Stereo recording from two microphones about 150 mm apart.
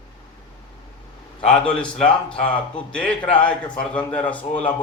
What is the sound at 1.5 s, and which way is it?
Speech, 5° left (ahead or behind).